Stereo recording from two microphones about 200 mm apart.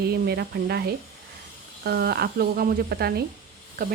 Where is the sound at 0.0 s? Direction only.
50° right (ahead or behind).